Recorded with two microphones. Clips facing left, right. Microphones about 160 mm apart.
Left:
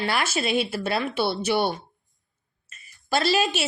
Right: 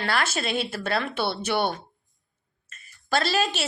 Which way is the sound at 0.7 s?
5° left (ahead or behind).